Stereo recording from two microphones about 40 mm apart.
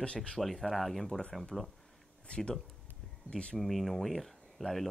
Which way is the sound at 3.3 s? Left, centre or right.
Centre.